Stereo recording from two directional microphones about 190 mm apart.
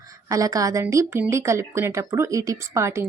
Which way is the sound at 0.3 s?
20° right (ahead or behind).